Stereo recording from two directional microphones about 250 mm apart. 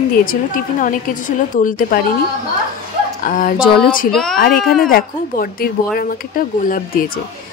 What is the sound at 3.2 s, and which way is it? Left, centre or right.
Speech, left.